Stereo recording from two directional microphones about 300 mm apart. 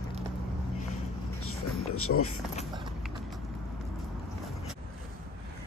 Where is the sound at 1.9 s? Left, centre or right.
Left.